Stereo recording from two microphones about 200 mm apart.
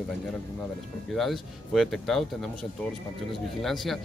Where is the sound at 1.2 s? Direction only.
Centre (ahead or behind).